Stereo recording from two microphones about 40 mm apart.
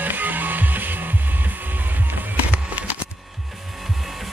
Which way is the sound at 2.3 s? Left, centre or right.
Right.